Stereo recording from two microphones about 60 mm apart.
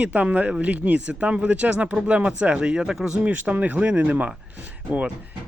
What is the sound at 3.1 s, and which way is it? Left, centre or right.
Speech, right.